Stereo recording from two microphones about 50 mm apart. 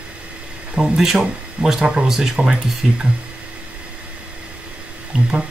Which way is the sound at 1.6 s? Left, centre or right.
Right.